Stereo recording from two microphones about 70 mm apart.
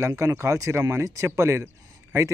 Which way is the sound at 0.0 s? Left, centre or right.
Right.